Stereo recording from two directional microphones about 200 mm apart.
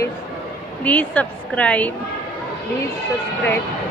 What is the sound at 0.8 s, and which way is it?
A woman's voice, 5° left (ahead or behind).